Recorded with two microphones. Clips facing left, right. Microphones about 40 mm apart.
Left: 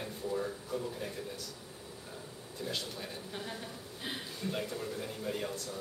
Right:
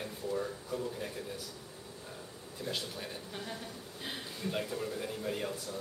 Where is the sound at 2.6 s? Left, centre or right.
Centre.